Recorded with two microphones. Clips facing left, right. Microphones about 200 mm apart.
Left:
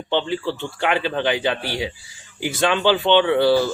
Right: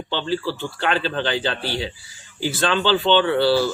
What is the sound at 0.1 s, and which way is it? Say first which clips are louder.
Speech: left 2 dB; 20° left (ahead or behind).